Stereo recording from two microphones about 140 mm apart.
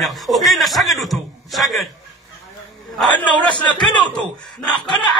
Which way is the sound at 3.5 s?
35° left (ahead or behind).